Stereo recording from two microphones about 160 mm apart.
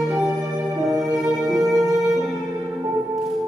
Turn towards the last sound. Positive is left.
turn(degrees=-20)  # may be behind; listen again after turning